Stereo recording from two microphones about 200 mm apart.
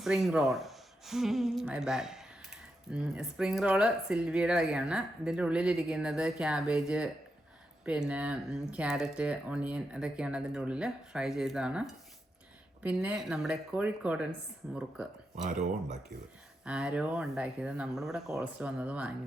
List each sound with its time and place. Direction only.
0.0 s speech: centre (ahead or behind)
15.4 s speech: 35° right (ahead or behind)
16.6 s speech: 5° right (ahead or behind)